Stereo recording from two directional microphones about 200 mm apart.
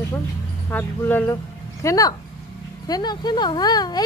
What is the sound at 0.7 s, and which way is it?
Speech, 10° left (ahead or behind).